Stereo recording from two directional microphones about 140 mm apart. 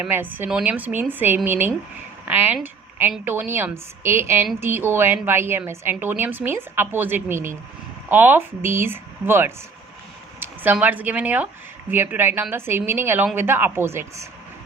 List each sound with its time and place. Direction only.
0.0 s a woman's voice: 15° right (ahead or behind)